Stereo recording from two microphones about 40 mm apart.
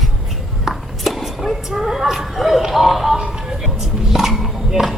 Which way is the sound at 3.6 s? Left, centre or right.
Centre.